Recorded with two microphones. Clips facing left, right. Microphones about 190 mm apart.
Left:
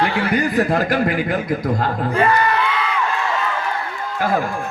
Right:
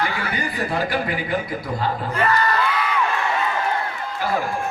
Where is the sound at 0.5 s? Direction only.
45° left (ahead or behind).